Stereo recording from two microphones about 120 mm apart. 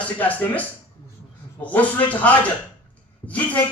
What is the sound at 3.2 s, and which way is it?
Speech, 35° left (ahead or behind).